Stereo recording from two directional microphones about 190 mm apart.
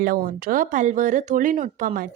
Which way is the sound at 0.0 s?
50° right (ahead or behind).